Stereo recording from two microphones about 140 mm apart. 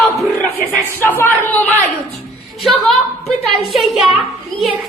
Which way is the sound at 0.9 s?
15° left (ahead or behind).